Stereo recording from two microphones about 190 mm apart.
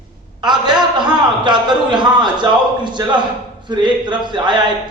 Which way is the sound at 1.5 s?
25° right (ahead or behind).